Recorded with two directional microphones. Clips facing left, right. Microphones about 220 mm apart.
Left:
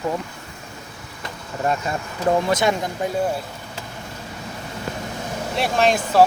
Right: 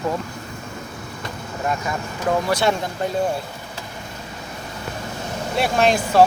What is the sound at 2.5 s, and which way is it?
Speech, 20° left (ahead or behind).